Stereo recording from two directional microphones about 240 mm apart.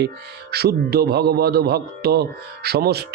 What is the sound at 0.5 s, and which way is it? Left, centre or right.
A man's voice, right.